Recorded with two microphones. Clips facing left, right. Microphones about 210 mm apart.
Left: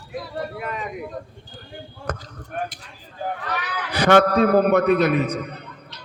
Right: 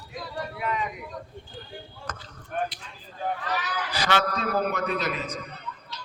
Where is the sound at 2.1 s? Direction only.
60° left (ahead or behind).